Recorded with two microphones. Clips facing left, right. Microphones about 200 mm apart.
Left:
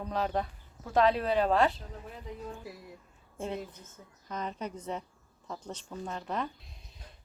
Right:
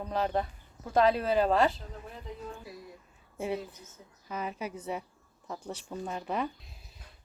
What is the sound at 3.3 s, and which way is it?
A woman's voice, 10° right (ahead or behind).